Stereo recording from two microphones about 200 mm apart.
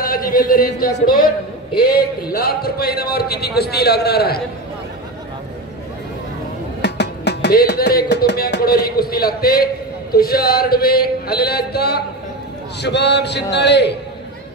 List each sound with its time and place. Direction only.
0.0 s speech: 45° left (ahead or behind)
2.3 s a man's voice: 50° left (ahead or behind)
6.8 s music: 55° left (ahead or behind)
10.1 s a man's voice: 50° left (ahead or behind)